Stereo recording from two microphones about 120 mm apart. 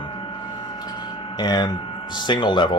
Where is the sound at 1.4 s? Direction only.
35° left (ahead or behind).